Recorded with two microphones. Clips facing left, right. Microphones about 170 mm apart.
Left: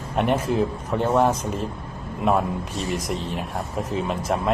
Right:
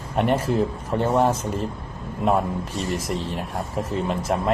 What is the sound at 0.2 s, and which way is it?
Speech, 10° left (ahead or behind).